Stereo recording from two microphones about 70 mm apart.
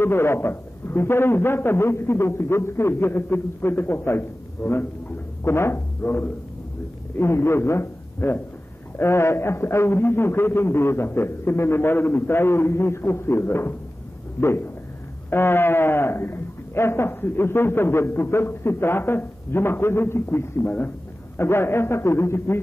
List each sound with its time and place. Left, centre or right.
0.0 s a man's voice: left
5.4 s a sound: left
7.2 s a man's voice: left
15.2 s a man's voice: left